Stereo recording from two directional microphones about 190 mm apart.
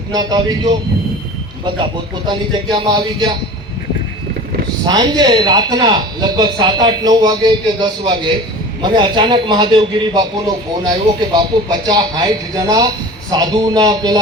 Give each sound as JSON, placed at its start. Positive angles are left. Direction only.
{"t": 0.1, "sound": "a man's voice", "side_deg": -20}
{"t": 4.9, "sound": "a man's voice", "side_deg": -20}